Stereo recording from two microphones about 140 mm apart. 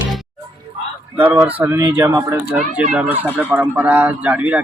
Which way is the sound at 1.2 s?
15° right (ahead or behind).